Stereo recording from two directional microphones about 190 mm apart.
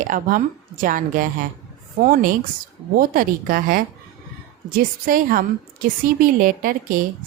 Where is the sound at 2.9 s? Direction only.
45° right (ahead or behind).